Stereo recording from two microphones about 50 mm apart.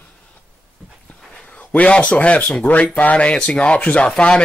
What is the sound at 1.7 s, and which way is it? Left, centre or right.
A man's voice, left.